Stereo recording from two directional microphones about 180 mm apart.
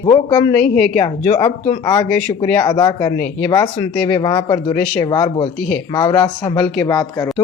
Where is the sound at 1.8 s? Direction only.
20° left (ahead or behind).